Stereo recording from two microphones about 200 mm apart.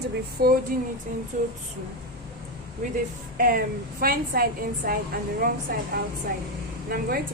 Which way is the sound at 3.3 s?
45° right (ahead or behind).